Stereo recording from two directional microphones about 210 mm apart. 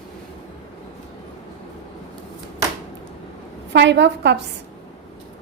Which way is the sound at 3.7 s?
55° right (ahead or behind).